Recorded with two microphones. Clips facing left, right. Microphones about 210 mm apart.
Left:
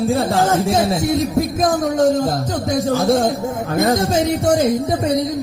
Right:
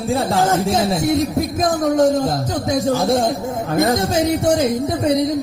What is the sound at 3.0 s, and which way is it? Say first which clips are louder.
Speech: left 1 dB; centre (ahead or behind).